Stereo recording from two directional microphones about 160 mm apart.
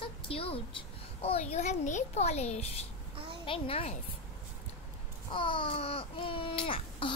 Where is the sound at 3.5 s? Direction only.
35° left (ahead or behind).